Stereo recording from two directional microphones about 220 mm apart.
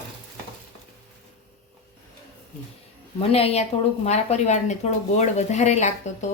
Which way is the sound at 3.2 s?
25° left (ahead or behind).